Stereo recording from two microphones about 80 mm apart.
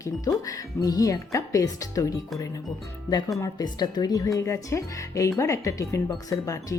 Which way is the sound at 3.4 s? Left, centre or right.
Left.